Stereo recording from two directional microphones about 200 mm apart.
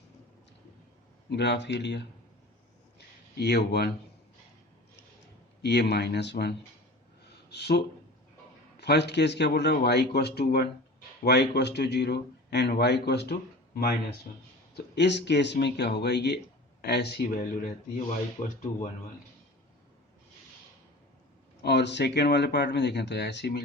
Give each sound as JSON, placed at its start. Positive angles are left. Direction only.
{"t": 1.3, "sound": "speech", "side_deg": 60}
{"t": 3.3, "sound": "speech", "side_deg": 55}
{"t": 5.6, "sound": "speech", "side_deg": 55}
{"t": 7.3, "sound": "a sound", "side_deg": 55}
{"t": 8.8, "sound": "speech", "side_deg": 55}
{"t": 14.8, "sound": "speech", "side_deg": 60}
{"t": 21.6, "sound": "speech", "side_deg": 55}